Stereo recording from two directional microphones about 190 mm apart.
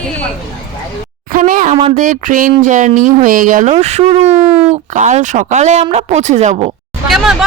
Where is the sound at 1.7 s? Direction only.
40° right (ahead or behind).